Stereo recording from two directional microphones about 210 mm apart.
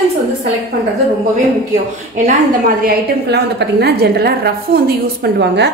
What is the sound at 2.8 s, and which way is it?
A woman's voice, 50° right (ahead or behind).